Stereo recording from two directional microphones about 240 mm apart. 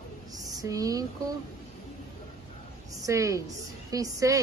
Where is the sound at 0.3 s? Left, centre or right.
Centre.